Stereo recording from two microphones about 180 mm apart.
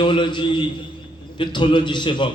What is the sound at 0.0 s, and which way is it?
A man's voice, 25° left (ahead or behind).